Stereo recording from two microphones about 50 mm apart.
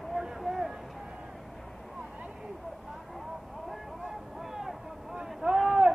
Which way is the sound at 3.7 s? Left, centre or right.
Centre.